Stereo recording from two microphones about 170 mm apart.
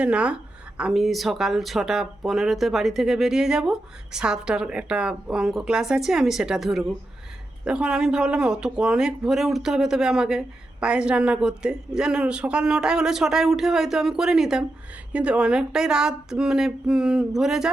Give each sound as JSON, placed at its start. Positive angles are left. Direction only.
{"t": 0.0, "sound": "a woman's voice", "side_deg": -5}